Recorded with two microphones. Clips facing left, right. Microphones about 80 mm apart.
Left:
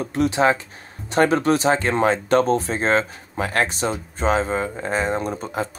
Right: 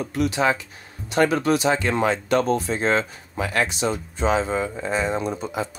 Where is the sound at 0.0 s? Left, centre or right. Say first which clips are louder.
Left 3 dB; left.